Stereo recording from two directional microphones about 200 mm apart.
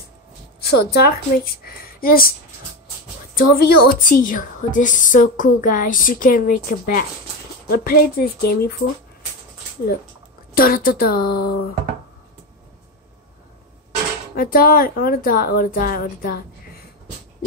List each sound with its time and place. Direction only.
0.7 s a woman's voice: 55° left (ahead or behind)
3.3 s a woman's voice: 50° left (ahead or behind)
10.5 s a woman's voice: 45° left (ahead or behind)
14.3 s a woman's voice: 45° left (ahead or behind)